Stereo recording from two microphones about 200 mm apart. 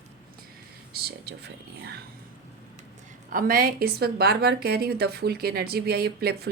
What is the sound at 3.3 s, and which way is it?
A woman's voice, 45° right (ahead or behind).